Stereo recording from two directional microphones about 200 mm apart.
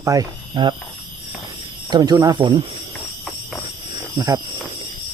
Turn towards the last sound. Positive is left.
turn(degrees=-20)  # may be behind; listen again after turning